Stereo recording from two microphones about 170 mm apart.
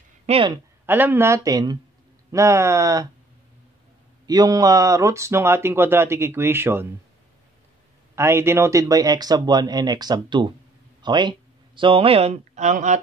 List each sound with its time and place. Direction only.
0.3 s speech: 30° right (ahead or behind)
0.8 s speech: 10° right (ahead or behind)
4.3 s speech: 20° right (ahead or behind)
8.2 s speech: 15° right (ahead or behind); by 13.0 s 45° right (ahead or behind)